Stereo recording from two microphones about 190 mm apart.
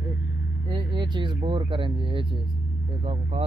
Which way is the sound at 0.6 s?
25° right (ahead or behind).